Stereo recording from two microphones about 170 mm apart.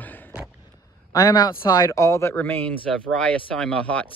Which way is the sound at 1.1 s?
25° left (ahead or behind).